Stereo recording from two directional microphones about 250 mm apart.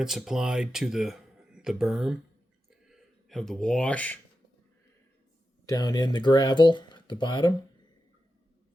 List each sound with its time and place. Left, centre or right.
0.0 s speech: centre
2.6 s a sound: centre
5.6 s speech: centre